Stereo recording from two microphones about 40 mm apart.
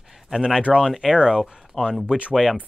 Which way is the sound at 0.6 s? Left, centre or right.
Right.